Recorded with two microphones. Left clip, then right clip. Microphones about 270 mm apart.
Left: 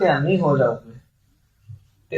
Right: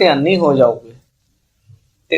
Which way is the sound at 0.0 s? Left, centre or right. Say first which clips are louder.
Right 6 dB; right.